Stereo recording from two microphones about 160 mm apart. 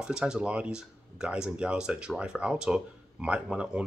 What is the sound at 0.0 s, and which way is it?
Speech, 5° right (ahead or behind).